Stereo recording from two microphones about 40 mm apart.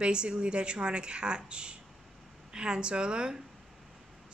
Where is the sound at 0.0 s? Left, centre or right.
Right.